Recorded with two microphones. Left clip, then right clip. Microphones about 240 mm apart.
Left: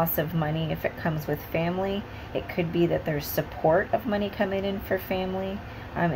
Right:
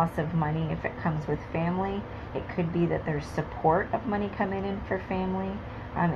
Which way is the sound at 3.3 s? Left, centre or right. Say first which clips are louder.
Left 2 dB; left.